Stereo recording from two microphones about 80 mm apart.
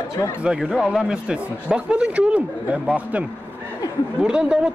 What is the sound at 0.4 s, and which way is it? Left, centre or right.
Speech, centre.